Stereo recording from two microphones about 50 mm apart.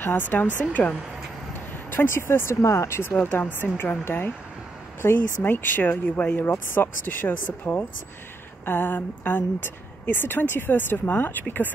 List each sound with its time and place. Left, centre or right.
0.0 s speech: left
1.9 s speech: left
3.0 s speech: left
3.5 s a woman's voice: left
6.4 s a woman's voice: left